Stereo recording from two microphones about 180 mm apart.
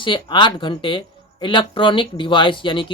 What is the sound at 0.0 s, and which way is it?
Speech, 25° left (ahead or behind).